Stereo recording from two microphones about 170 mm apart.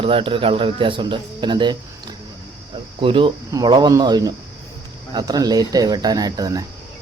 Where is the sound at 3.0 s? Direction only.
30° right (ahead or behind).